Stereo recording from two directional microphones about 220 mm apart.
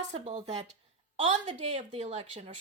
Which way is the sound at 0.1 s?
30° right (ahead or behind).